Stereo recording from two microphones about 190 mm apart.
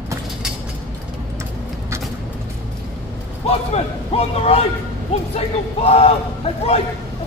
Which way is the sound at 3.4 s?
35° left (ahead or behind).